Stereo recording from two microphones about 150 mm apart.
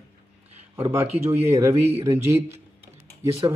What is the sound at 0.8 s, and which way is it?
Speech, 40° right (ahead or behind).